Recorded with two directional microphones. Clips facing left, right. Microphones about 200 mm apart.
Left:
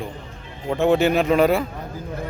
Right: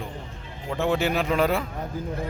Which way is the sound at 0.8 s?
20° left (ahead or behind).